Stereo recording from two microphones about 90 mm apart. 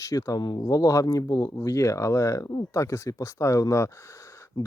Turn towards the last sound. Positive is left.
turn(degrees=35)  # may be behind; listen again after turning